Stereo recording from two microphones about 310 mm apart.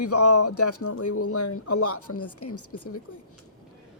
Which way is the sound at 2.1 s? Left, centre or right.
Left.